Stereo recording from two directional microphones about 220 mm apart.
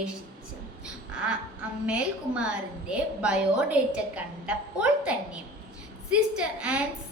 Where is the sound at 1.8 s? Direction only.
5° right (ahead or behind).